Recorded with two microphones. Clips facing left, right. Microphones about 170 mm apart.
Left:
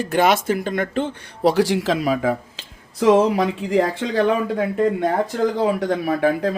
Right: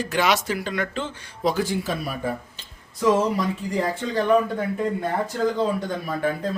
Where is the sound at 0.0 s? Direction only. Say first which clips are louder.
Left 5 dB; 50° left (ahead or behind).